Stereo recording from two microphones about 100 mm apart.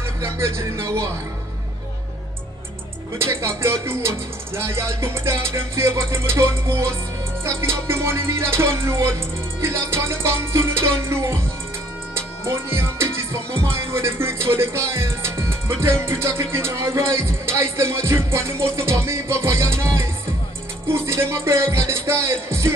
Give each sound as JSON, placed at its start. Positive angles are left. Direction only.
{"t": 0.2, "sound": "music", "side_deg": -30}
{"t": 3.2, "sound": "music", "side_deg": -30}